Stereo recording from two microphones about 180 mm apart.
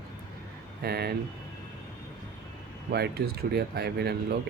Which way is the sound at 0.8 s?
60° right (ahead or behind).